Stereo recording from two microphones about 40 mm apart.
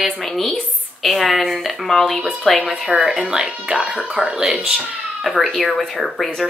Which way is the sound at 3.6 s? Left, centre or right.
Centre.